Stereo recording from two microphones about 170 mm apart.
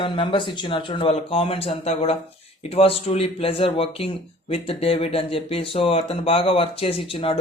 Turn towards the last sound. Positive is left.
turn(degrees=35)  # may be behind; listen again after turning